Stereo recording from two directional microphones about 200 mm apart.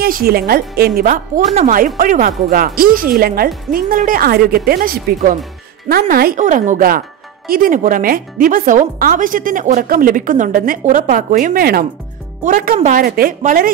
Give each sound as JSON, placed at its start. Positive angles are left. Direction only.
{"t": 0.0, "sound": "speech", "side_deg": -50}